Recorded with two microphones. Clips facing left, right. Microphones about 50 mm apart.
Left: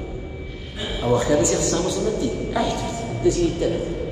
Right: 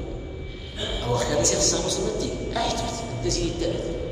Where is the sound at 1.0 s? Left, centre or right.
Centre.